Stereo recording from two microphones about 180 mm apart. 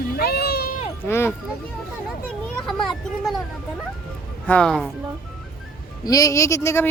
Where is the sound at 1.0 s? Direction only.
15° left (ahead or behind).